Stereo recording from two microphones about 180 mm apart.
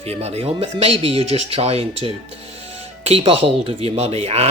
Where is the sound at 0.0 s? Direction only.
35° right (ahead or behind).